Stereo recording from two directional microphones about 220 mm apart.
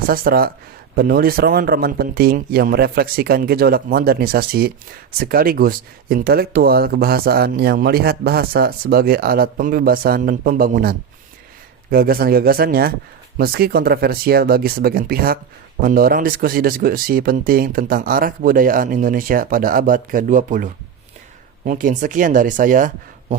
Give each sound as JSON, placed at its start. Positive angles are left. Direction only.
{"t": 0.1, "sound": "speech", "side_deg": -40}